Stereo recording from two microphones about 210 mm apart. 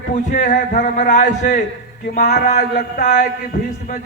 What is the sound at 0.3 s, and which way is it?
A man's voice, 40° left (ahead or behind).